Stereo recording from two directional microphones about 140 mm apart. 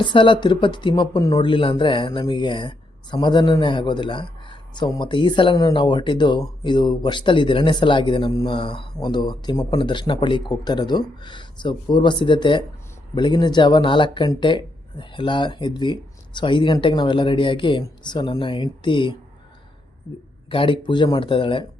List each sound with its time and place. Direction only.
0.0 s speech: 35° left (ahead or behind)
20.5 s speech: 40° left (ahead or behind)